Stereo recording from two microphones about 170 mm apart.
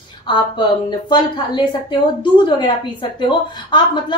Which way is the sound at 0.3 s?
25° left (ahead or behind).